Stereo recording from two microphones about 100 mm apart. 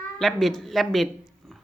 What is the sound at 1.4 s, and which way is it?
Dog, centre (ahead or behind).